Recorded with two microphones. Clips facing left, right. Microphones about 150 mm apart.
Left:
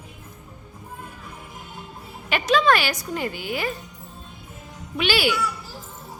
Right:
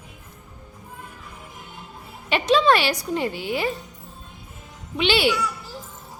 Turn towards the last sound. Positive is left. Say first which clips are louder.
# right 2 dB
turn(degrees=-25)  # may be behind; listen again after turning